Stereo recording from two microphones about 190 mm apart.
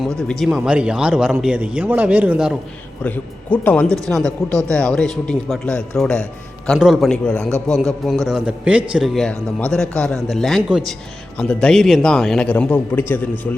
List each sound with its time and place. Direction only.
0.0 s speech: 5° left (ahead or behind)
3.0 s speech: 10° left (ahead or behind)